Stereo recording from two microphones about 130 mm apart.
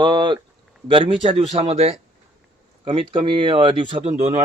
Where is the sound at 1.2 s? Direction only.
60° right (ahead or behind).